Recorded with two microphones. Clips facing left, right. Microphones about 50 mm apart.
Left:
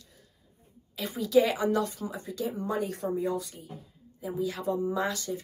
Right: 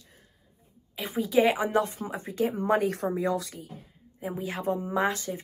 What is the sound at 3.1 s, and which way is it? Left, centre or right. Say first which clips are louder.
Speech: right 2 dB; right.